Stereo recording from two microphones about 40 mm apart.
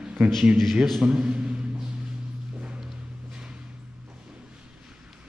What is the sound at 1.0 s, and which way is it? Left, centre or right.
Speech, right.